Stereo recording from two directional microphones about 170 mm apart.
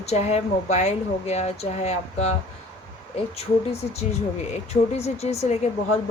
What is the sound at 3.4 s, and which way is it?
Speech, 35° left (ahead or behind).